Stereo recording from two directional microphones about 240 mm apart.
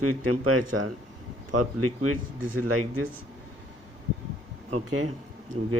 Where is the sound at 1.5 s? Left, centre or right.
Right.